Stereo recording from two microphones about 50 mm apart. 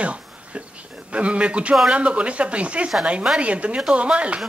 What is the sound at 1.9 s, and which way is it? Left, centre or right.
A woman's voice, right.